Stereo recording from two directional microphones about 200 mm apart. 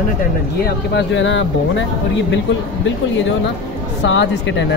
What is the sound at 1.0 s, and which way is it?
Speech, 65° left (ahead or behind).